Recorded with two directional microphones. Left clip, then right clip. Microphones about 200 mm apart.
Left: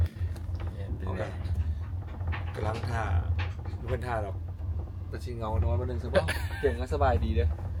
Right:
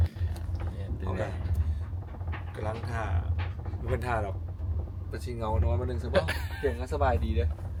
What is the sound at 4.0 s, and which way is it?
Speech, centre (ahead or behind).